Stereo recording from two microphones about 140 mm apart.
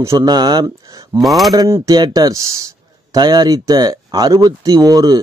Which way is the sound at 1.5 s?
25° right (ahead or behind).